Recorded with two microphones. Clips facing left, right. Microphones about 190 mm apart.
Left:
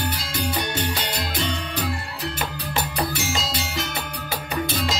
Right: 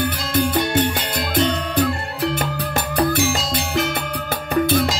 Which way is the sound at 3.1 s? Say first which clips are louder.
Right 7 dB; 55° right (ahead or behind).